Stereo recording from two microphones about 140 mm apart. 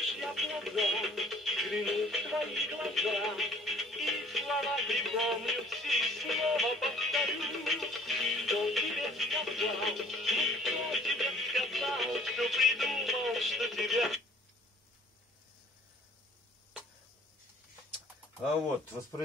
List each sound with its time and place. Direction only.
0.0 s music: centre (ahead or behind)